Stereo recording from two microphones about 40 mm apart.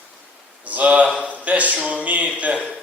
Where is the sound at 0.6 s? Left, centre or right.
Right.